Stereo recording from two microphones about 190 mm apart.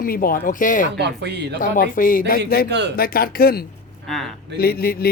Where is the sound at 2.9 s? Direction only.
50° left (ahead or behind).